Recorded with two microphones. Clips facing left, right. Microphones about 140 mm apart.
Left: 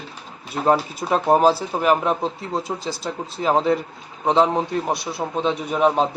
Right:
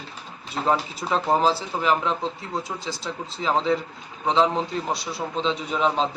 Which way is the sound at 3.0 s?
55° left (ahead or behind).